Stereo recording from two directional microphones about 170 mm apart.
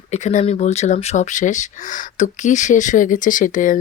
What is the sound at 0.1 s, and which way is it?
Speech, 40° left (ahead or behind).